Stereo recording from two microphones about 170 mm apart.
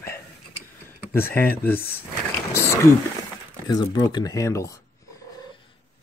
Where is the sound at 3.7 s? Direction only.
20° left (ahead or behind).